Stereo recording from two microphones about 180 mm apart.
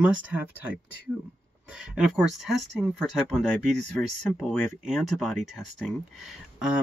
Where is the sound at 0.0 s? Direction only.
5° right (ahead or behind).